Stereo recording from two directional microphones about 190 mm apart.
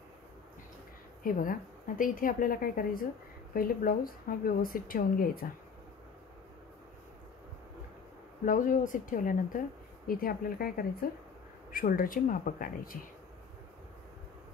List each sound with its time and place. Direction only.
1.2 s a woman's voice: 45° left (ahead or behind)
8.5 s a woman's voice: 45° left (ahead or behind)